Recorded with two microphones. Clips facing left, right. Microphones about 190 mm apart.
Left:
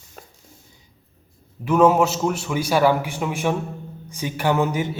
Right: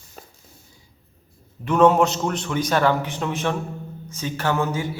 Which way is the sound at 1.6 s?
5° left (ahead or behind).